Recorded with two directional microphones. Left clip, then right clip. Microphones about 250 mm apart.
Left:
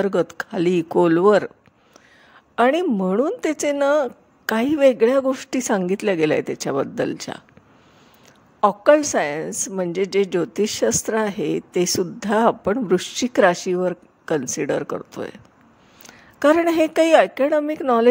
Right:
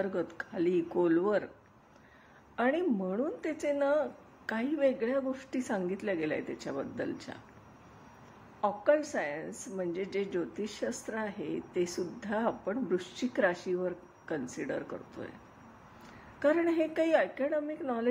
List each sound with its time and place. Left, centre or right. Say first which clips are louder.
0.0 s a woman's voice: left 13 dB; left
2.5 s a woman's voice: left 12 dB; left
8.5 s a woman's voice: left 13 dB; left
16.3 s a woman's voice: left 12 dB; left